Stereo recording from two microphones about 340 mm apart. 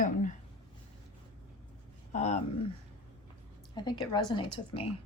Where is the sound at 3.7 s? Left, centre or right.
Centre.